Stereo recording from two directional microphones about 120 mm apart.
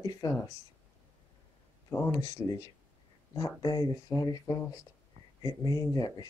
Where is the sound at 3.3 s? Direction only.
35° left (ahead or behind).